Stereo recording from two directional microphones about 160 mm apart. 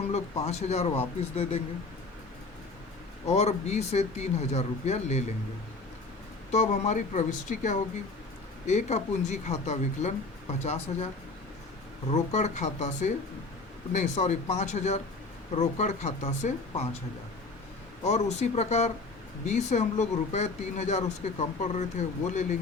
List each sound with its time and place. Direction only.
0.1 s speech: 45° left (ahead or behind)
3.2 s speech: 40° left (ahead or behind)
6.5 s speech: 45° left (ahead or behind)
12.1 s speech: 45° left (ahead or behind)
18.0 s speech: 45° left (ahead or behind)